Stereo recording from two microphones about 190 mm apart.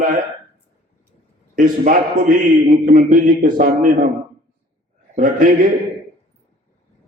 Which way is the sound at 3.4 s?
45° right (ahead or behind).